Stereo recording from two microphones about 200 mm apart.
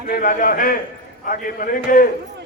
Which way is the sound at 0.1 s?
40° left (ahead or behind).